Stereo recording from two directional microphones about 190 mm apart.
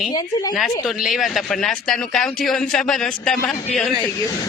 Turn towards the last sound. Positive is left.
turn(degrees=0)  # may be behind; listen again after turning